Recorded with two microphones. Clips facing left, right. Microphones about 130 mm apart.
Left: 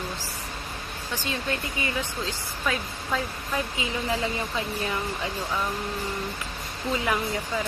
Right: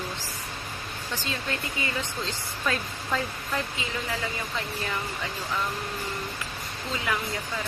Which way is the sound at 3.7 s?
20° left (ahead or behind).